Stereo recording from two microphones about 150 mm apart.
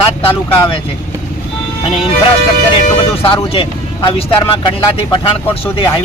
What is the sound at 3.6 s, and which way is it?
Speech, 35° left (ahead or behind).